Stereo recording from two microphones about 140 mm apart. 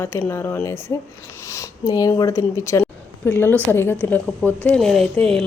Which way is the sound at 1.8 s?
25° left (ahead or behind).